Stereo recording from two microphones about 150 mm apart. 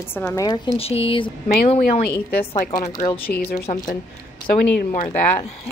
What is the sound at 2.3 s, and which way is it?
Speech, 90° left.